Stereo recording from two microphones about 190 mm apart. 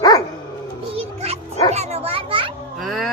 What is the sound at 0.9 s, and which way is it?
Music, 35° right (ahead or behind).